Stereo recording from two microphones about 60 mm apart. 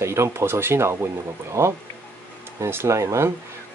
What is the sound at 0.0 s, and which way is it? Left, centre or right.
Speech, right.